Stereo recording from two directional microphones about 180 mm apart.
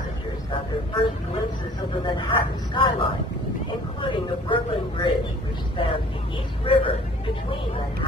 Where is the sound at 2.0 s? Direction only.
25° left (ahead or behind).